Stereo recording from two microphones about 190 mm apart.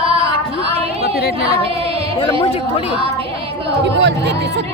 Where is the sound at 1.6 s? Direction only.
30° right (ahead or behind).